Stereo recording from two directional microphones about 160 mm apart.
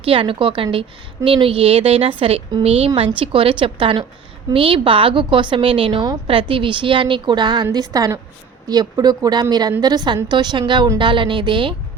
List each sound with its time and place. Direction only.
0.0 s a woman's voice: 35° right (ahead or behind)